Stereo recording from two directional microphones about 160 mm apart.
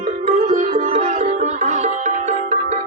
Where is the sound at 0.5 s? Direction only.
60° right (ahead or behind).